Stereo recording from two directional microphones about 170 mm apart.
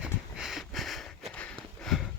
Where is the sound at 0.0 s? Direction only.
5° right (ahead or behind).